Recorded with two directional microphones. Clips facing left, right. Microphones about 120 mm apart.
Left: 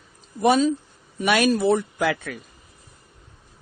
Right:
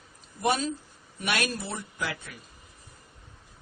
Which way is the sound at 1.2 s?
90° left.